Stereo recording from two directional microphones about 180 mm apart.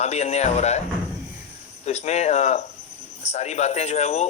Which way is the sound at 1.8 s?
40° left (ahead or behind).